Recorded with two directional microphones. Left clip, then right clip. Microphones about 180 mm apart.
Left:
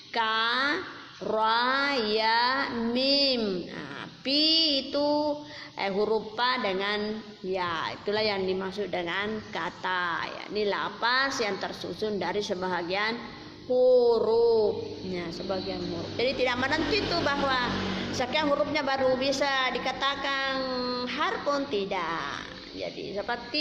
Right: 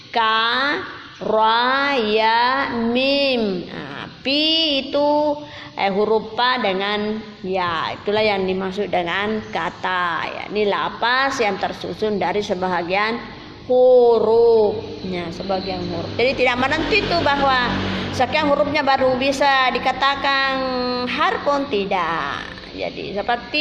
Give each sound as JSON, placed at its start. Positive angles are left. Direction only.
{"t": 0.1, "sound": "a woman's voice", "side_deg": -20}
{"t": 4.3, "sound": "female singing", "side_deg": -25}
{"t": 5.8, "sound": "a woman's voice", "side_deg": -20}